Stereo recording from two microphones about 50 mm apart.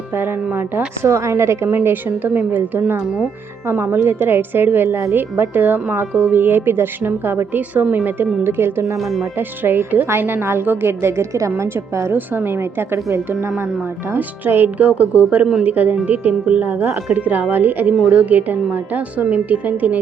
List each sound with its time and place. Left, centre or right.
1.0 s a woman's voice: right
1.8 s a woman's voice: right
4.9 s a woman's voice: right
5.1 s speech: right
7.7 s a woman's voice: right
12.5 s speech: right
14.2 s a woman's voice: right
14.8 s a woman's voice: right